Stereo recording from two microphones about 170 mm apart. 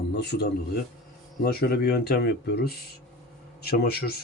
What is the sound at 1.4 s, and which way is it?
Speech, 65° left (ahead or behind).